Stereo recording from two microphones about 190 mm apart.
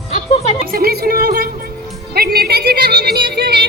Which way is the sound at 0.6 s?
50° right (ahead or behind).